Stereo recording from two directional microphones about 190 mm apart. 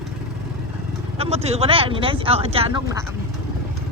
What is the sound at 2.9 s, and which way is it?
Speech, 15° right (ahead or behind).